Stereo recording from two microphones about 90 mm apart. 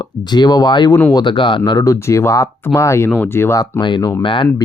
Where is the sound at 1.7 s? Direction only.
45° left (ahead or behind).